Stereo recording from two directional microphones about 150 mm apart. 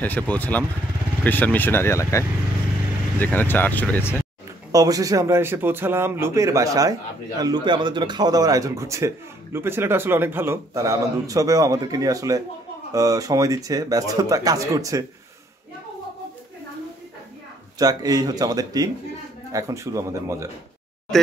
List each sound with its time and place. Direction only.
0.0 s speech: 10° left (ahead or behind)
4.7 s a man's voice: 25° right (ahead or behind)
17.7 s a man's voice: 25° right (ahead or behind)